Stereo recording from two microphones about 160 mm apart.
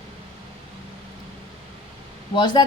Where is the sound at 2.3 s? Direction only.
25° left (ahead or behind).